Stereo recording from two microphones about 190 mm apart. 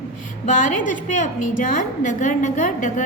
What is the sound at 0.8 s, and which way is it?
A woman's voice, 45° left (ahead or behind).